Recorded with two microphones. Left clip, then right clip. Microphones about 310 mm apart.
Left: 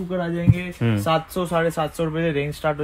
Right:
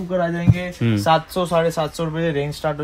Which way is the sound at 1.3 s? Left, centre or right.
Right.